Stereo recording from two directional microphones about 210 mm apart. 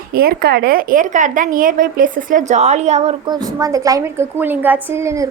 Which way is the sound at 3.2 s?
20° right (ahead or behind).